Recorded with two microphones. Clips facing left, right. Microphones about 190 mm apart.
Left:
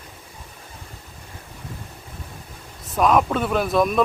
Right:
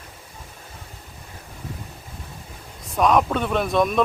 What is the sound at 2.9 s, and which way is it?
Speech, centre (ahead or behind).